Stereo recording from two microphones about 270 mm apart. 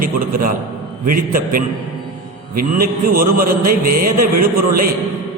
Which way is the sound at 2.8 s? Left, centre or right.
Right.